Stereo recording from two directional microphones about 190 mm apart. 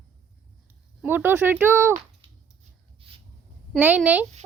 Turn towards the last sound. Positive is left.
turn(degrees=-10)  # may be behind; listen again after turning